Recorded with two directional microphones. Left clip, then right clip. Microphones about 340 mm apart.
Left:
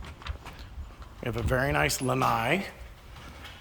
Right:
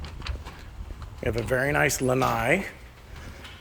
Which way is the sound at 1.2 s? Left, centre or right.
Centre.